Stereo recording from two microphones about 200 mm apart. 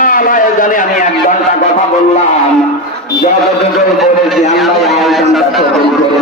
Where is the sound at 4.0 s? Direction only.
Centre (ahead or behind).